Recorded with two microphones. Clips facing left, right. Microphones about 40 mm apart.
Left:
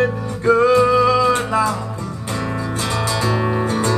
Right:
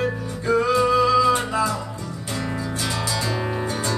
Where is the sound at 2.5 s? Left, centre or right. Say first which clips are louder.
Left 4 dB; left.